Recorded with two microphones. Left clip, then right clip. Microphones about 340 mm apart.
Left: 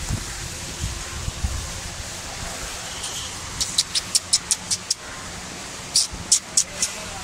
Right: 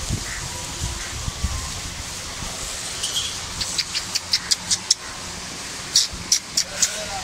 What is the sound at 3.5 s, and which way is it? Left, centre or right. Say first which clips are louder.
Vehicle: left 3 dB; centre.